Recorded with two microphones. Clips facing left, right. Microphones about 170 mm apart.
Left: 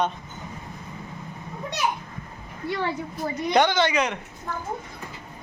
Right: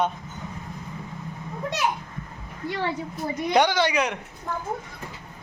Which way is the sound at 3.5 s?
10° right (ahead or behind).